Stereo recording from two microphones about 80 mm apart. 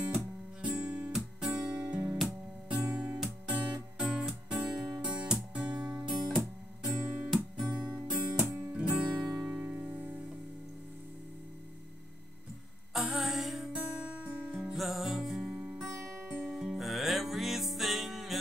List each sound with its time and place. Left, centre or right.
0.0 s guitar: centre
1.4 s music: centre
6.1 s guitar: centre
7.5 s music: centre
8.5 s music: right
8.7 s music: centre
9.5 s music: centre
12.9 s music: centre
13.7 s guitar: centre
14.3 s music: right
14.6 s music: centre
15.9 s music: right
16.3 s music: centre
16.6 s music: centre